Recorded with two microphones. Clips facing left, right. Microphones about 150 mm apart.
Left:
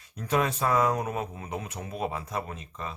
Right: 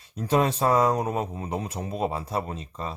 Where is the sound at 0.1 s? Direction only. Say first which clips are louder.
Right 4 dB; 30° right (ahead or behind).